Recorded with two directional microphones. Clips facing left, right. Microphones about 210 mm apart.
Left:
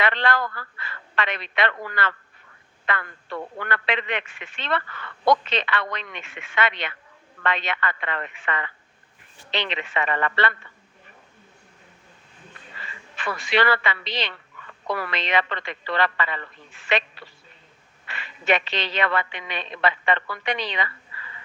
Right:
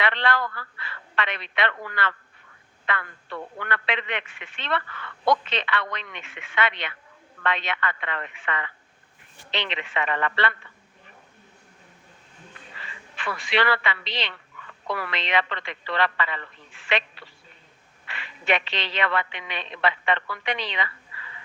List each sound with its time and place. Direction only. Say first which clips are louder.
0.0 s a man's voice: left 2 dB; 45° left (ahead or behind)
13.1 s a man's voice: left 2 dB; 40° left (ahead or behind)